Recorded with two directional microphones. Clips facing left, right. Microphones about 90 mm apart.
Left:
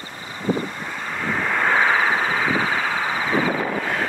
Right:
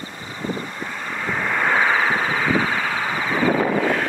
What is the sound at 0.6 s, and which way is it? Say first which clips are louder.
Vehicle: even; 5° left (ahead or behind).